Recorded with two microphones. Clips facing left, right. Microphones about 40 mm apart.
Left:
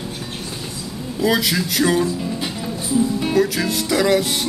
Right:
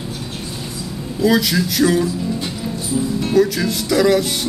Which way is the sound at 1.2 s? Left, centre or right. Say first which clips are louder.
Right 3 dB; centre.